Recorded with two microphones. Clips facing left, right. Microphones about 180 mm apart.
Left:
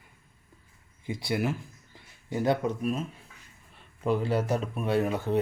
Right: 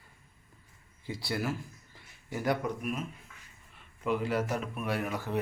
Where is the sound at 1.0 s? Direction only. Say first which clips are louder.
Left 4 dB; 20° left (ahead or behind).